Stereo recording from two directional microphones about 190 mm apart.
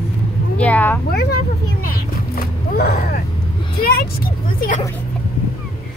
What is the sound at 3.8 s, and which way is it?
Vehicle, 50° left (ahead or behind).